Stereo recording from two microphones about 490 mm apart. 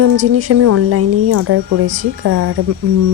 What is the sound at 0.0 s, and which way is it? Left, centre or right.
Speech, right.